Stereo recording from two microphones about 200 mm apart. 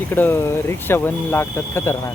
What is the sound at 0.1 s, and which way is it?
Speech, 10° left (ahead or behind).